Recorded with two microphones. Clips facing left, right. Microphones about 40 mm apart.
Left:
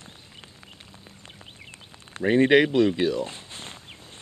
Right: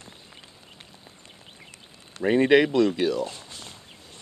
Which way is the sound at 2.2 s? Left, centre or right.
Centre.